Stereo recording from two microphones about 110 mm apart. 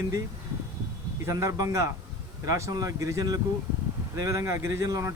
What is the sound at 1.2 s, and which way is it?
Speech, 30° right (ahead or behind).